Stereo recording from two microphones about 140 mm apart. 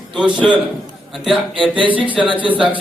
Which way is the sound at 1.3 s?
35° right (ahead or behind).